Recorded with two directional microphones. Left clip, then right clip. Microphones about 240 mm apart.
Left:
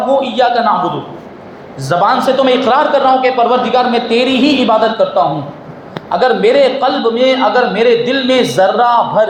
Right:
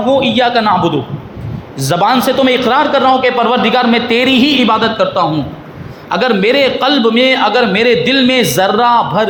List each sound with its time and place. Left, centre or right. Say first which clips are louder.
0.0 s a man's voice: right 1 dB; right